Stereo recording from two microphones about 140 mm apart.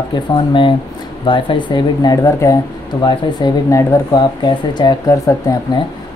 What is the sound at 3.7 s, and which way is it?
Speech, 30° left (ahead or behind).